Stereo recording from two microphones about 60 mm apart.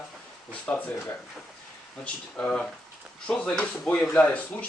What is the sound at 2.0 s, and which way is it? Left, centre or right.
Speech, left.